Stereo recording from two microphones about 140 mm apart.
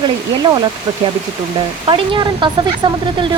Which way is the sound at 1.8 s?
35° right (ahead or behind).